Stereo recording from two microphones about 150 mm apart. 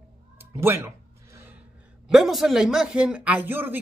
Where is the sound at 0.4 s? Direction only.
15° right (ahead or behind).